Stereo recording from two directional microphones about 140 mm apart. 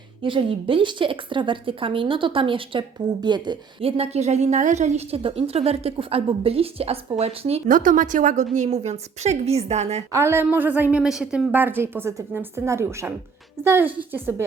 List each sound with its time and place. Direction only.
0.2 s a woman's voice: 40° right (ahead or behind)
7.7 s a woman's voice: 70° right (ahead or behind)
8.5 s a woman's voice: 55° right (ahead or behind)
10.1 s a woman's voice: 20° right (ahead or behind)